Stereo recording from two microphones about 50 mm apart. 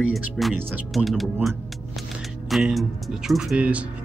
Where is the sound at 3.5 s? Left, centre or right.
Right.